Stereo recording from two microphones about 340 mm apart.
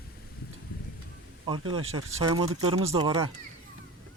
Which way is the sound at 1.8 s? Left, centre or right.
Right.